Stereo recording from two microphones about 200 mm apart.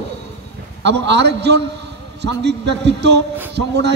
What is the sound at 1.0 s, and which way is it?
A man's voice, 60° right (ahead or behind).